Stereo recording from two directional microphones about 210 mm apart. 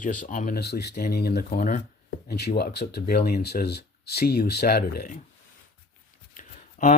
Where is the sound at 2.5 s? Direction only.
50° left (ahead or behind).